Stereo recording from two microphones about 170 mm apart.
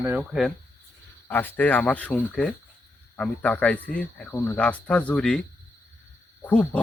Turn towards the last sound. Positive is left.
turn(degrees=10)  # may be behind; listen again after turning